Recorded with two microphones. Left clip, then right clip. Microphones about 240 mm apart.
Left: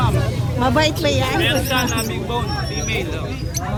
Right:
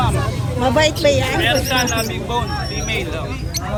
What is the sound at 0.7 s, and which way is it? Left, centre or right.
Speech, left.